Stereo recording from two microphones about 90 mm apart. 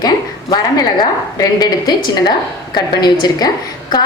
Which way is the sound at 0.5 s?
50° left (ahead or behind).